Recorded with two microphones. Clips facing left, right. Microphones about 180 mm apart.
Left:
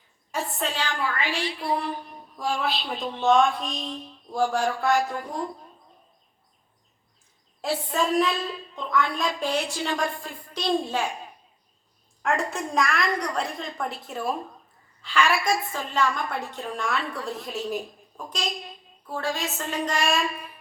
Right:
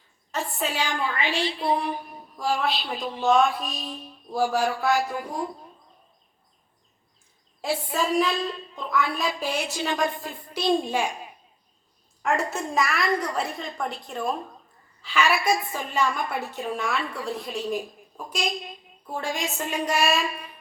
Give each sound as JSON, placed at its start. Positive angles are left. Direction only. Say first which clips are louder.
{"t": 0.3, "sound": "a sound", "louder": "even", "side_deg": 5}
{"t": 0.6, "sound": "a woman's voice", "louder": "right 2 dB", "side_deg": -10}
{"t": 7.7, "sound": "a woman's voice", "louder": "even", "side_deg": -5}
{"t": 9.9, "sound": "music", "louder": "right 3 dB", "side_deg": -20}
{"t": 10.5, "sound": "a woman's voice", "louder": "right 2 dB", "side_deg": -10}
{"t": 12.2, "sound": "a woman's voice", "louder": "right 1 dB", "side_deg": 0}
{"t": 19.0, "sound": "a woman's voice", "louder": "even", "side_deg": -15}